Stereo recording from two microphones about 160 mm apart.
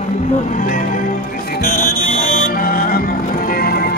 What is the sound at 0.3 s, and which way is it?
Music, 55° left (ahead or behind).